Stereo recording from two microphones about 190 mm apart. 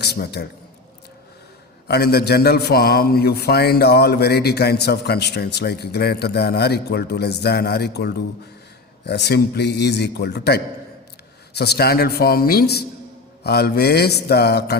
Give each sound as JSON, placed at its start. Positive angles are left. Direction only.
{"t": 0.0, "sound": "a man's voice", "side_deg": 60}
{"t": 1.9, "sound": "a man's voice", "side_deg": 55}